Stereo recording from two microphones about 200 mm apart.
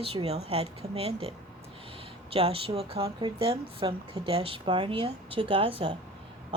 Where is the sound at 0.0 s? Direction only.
30° right (ahead or behind).